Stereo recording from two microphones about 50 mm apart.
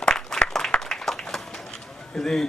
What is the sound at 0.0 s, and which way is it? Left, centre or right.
Applause, centre.